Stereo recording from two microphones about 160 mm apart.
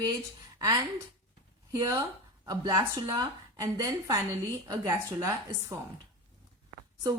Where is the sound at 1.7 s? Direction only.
25° right (ahead or behind).